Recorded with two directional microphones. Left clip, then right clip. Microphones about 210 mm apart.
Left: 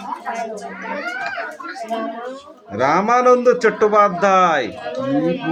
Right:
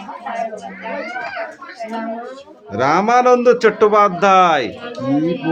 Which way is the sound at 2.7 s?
20° right (ahead or behind).